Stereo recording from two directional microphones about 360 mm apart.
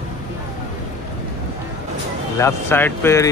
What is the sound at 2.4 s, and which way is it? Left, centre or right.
Speech, centre.